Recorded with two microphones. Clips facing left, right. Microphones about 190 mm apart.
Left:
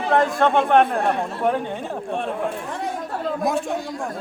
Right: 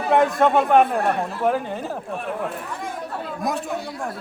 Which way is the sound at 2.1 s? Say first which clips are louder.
Left 6 dB; 30° left (ahead or behind).